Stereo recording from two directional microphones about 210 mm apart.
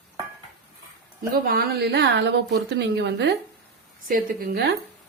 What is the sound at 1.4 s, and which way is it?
A woman's voice, 45° right (ahead or behind).